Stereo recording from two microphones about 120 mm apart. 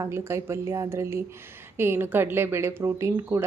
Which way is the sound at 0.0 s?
25° right (ahead or behind).